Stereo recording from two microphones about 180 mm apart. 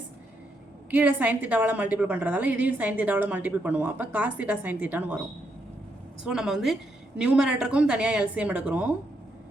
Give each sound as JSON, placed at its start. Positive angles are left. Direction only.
{"t": 0.9, "sound": "a woman's voice", "side_deg": -10}
{"t": 6.2, "sound": "speech", "side_deg": -5}